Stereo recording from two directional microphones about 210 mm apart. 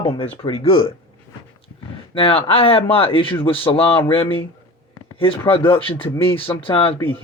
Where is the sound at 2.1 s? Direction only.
25° left (ahead or behind).